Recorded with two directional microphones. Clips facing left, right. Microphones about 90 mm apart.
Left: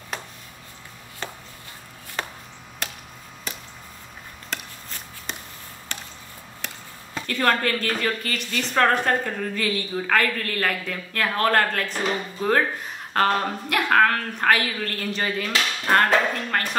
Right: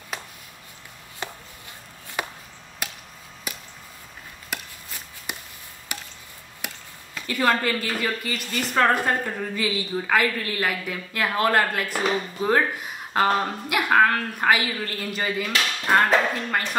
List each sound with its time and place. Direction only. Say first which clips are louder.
1.2 s a sound: even; 15° right (ahead or behind)
2.2 s chop: right 1 dB; 15° right (ahead or behind)
3.5 s a sound: even; 10° right (ahead or behind)
4.5 s chopping: even; 10° right (ahead or behind)
5.9 s squish: right 1 dB; 10° right (ahead or behind)
6.6 s chop: right 1 dB; 10° right (ahead or behind)
7.2 s a woman's voice: even; 10° right (ahead or behind)